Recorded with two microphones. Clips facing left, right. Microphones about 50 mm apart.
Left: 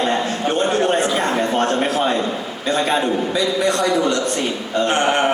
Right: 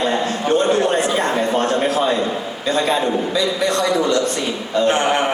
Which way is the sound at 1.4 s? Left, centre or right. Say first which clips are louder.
Even; centre.